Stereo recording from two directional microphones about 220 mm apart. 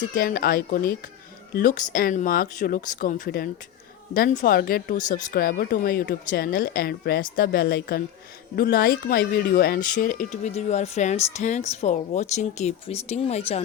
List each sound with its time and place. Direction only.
0.1 s speech: 40° left (ahead or behind)